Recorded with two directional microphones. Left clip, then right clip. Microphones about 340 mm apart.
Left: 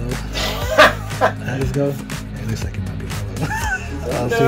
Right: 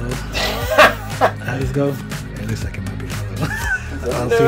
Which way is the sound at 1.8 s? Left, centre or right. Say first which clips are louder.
Right 1 dB; centre.